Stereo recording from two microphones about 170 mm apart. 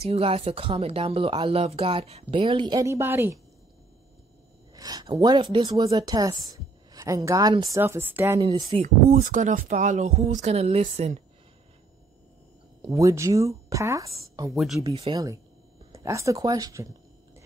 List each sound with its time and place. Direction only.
0.0 s speech: 35° right (ahead or behind); by 3.3 s 15° right (ahead or behind)
4.7 s a sound: 20° right (ahead or behind)
5.2 s speech: 25° right (ahead or behind)
8.7 s speech: 35° right (ahead or behind)
9.1 s speech: 50° right (ahead or behind)
12.9 s speech: 20° right (ahead or behind)
14.5 s speech: centre (ahead or behind)
15.1 s speech: 30° right (ahead or behind)
15.9 s speech: 20° right (ahead or behind)